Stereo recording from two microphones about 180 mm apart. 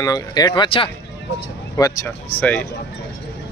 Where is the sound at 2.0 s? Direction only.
10° left (ahead or behind).